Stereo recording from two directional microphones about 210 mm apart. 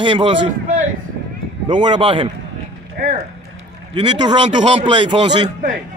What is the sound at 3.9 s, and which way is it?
A man's voice, 20° right (ahead or behind).